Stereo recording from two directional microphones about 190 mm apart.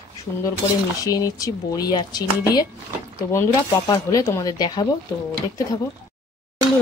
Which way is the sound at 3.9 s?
15° left (ahead or behind).